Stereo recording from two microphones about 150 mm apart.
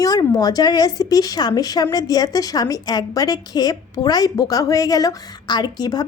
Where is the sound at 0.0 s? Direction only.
25° left (ahead or behind).